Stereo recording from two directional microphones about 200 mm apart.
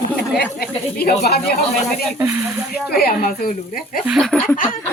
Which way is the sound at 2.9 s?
50° left (ahead or behind).